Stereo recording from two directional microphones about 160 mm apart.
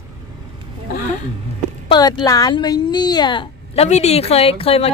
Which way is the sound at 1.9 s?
25° left (ahead or behind).